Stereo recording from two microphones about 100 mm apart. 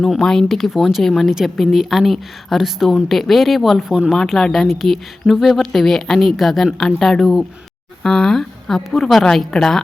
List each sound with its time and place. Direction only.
0.0 s speech: 5° left (ahead or behind)